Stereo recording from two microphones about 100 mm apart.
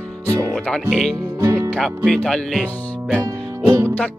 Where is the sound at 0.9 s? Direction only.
5° left (ahead or behind).